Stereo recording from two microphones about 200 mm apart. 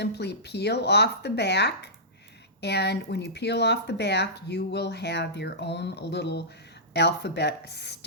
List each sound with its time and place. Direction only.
0.0 s speech: 55° left (ahead or behind)